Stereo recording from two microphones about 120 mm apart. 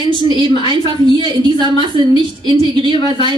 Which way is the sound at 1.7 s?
45° left (ahead or behind).